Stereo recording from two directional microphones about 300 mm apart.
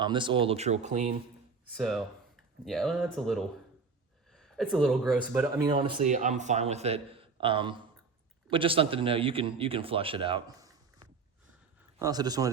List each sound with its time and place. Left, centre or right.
0.0 s speech: centre
1.7 s speech: centre